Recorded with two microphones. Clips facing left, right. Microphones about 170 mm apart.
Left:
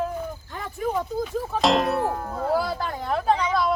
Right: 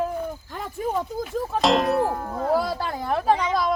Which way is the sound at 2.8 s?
10° right (ahead or behind).